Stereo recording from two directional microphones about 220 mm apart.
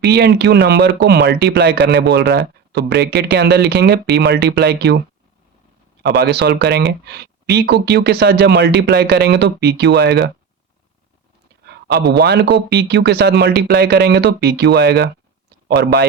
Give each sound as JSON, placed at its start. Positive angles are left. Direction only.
{"t": 0.0, "sound": "a man's voice", "side_deg": -50}
{"t": 6.0, "sound": "a man's voice", "side_deg": -45}
{"t": 11.6, "sound": "a man's voice", "side_deg": -45}